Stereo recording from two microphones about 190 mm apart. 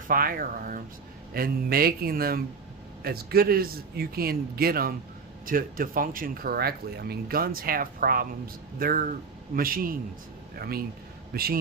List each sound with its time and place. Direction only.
0.1 s a man's voice: 50° right (ahead or behind)